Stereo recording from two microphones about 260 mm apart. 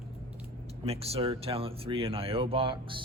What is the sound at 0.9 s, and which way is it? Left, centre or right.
Speech, right.